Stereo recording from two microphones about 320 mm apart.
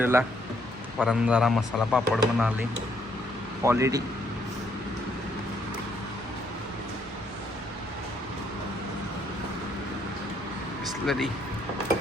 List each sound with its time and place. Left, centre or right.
0.0 s a man's voice: centre
3.6 s a man's voice: centre
11.0 s speech: centre